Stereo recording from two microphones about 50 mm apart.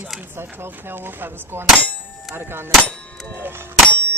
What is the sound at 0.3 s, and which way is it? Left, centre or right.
Speech, right.